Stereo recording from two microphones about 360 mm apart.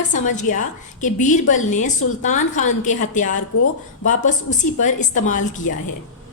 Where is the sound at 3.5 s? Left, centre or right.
Left.